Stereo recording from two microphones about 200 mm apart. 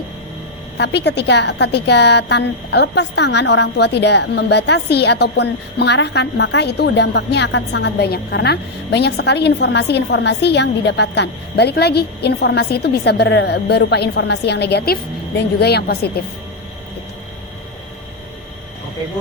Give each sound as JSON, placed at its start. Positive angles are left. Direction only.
{"t": 0.8, "sound": "a woman's voice", "side_deg": 60}